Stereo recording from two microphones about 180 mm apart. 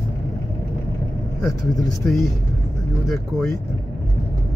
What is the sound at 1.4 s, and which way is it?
Speech, 20° left (ahead or behind).